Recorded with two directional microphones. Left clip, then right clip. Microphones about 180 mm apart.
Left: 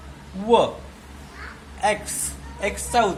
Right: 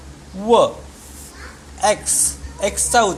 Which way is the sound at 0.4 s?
30° right (ahead or behind).